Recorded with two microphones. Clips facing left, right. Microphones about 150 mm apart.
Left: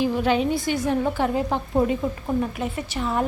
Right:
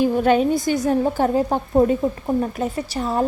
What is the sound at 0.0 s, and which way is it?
A woman's voice, 45° right (ahead or behind).